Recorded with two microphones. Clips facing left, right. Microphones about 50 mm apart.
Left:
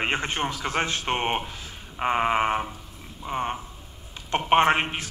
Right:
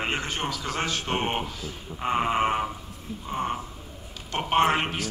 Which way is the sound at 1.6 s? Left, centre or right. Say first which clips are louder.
Left 3 dB; left.